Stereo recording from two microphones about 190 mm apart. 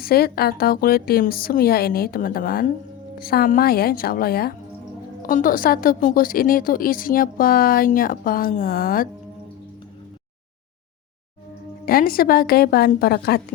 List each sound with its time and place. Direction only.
0.0 s a woman's voice: 55° left (ahead or behind)
11.9 s a woman's voice: 50° left (ahead or behind)